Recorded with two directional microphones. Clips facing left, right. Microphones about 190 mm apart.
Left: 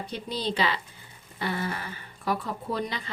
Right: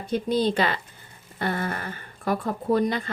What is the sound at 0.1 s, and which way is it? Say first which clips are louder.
Speech: right 11 dB; 50° right (ahead or behind).